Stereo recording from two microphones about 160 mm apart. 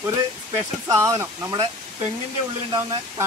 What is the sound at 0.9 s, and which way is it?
Speech, 20° right (ahead or behind).